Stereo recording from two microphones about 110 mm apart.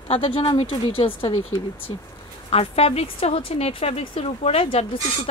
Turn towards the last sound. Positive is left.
turn(degrees=60)  # may be behind; listen again after turning